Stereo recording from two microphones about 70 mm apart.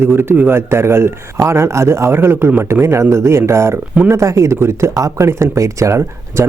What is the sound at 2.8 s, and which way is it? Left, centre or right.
Speech, right.